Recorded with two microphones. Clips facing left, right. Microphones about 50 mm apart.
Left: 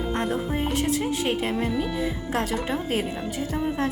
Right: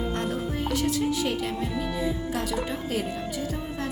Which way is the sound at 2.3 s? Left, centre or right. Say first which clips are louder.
Left 3 dB; left.